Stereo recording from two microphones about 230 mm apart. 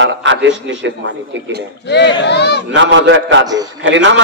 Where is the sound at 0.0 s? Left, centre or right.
Right.